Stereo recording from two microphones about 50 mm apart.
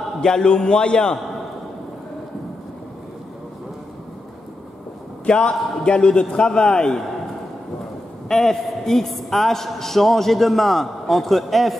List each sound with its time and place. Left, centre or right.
0.2 s a man's voice: centre
5.2 s a man's voice: centre
8.3 s a man's voice: centre